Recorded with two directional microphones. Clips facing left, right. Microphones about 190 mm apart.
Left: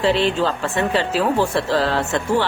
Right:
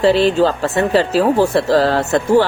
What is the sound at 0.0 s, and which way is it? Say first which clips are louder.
Speech: right 6 dB; 40° right (ahead or behind).